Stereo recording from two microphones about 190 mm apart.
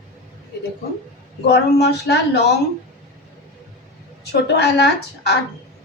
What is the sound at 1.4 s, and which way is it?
Speech, 60° left (ahead or behind).